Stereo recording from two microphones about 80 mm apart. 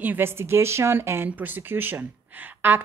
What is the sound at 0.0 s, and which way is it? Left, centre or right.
A woman's voice, right.